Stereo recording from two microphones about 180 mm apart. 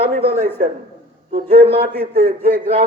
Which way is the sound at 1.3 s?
50° right (ahead or behind).